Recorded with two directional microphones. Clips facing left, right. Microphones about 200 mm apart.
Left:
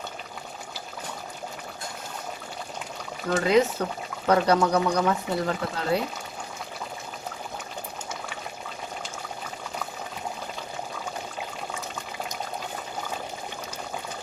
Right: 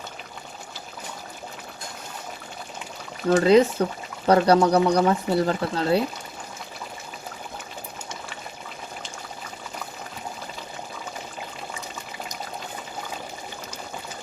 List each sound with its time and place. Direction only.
3.2 s speech: 30° right (ahead or behind)